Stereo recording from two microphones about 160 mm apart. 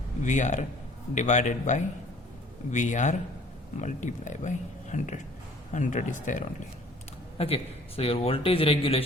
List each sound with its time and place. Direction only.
0.2 s speech: 50° left (ahead or behind)
7.3 s a man's voice: 40° left (ahead or behind)